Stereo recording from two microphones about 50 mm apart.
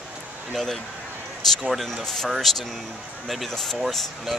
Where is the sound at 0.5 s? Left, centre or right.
Centre.